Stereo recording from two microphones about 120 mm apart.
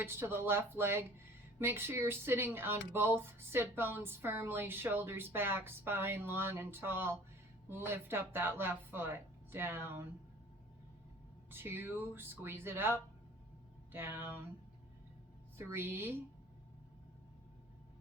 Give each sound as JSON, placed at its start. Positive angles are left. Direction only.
{"t": 0.0, "sound": "speech", "side_deg": -20}
{"t": 11.5, "sound": "speech", "side_deg": -20}
{"t": 15.5, "sound": "speech", "side_deg": -20}